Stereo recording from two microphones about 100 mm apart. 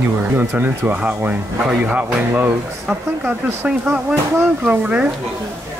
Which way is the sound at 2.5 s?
10° right (ahead or behind).